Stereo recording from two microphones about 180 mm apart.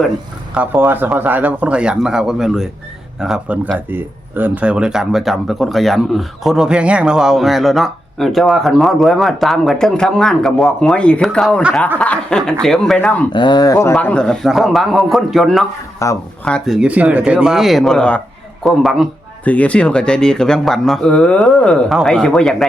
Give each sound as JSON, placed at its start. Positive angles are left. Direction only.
{"t": 0.5, "sound": "speech", "side_deg": -10}
{"t": 13.3, "sound": "speech", "side_deg": 25}
{"t": 16.0, "sound": "speech", "side_deg": 15}
{"t": 16.5, "sound": "speech", "side_deg": 0}